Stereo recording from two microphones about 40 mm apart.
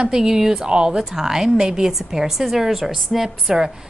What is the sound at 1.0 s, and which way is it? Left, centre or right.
A woman's voice, centre.